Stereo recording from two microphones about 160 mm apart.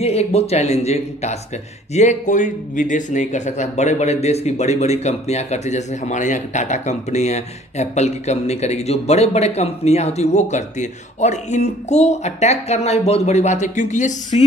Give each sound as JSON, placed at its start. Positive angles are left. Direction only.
{"t": 0.0, "sound": "speech", "side_deg": 40}